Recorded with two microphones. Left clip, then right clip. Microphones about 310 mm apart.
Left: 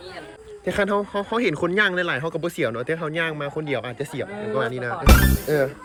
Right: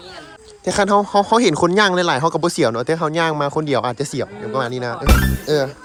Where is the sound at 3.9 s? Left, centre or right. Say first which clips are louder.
Right 6 dB; right.